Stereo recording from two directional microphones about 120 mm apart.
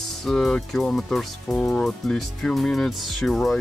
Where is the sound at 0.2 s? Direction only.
5° left (ahead or behind).